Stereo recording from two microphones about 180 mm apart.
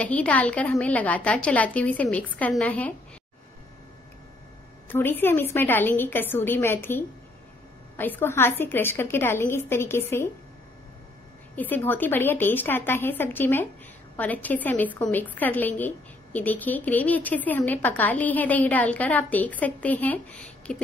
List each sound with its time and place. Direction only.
0.0 s a woman's voice: 5° left (ahead or behind)
4.8 s a woman's voice: 10° left (ahead or behind)
11.5 s a woman's voice: 10° left (ahead or behind)